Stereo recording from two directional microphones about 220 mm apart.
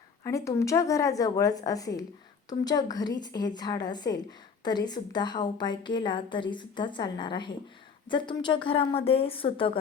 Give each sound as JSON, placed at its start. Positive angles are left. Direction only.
{"t": 0.3, "sound": "a woman's voice", "side_deg": 15}